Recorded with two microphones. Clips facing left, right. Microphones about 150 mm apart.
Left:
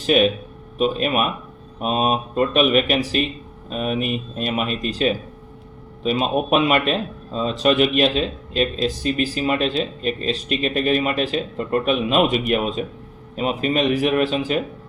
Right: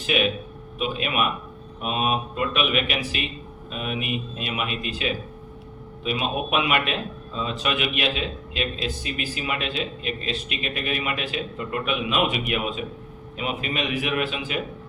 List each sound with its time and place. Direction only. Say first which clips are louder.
0.0 s speech: left 7 dB; 40° left (ahead or behind)